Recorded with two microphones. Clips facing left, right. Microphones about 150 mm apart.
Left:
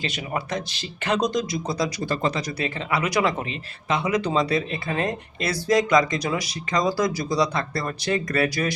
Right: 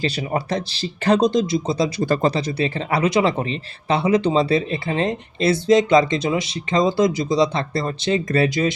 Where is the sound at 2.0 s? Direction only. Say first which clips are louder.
Right 6 dB; 45° right (ahead or behind).